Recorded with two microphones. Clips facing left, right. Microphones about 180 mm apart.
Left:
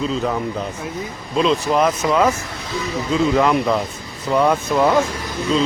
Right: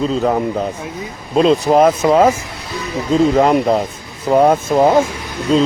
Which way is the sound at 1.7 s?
45° right (ahead or behind).